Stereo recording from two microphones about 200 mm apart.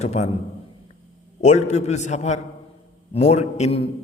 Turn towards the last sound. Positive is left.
turn(degrees=35)  # may be behind; listen again after turning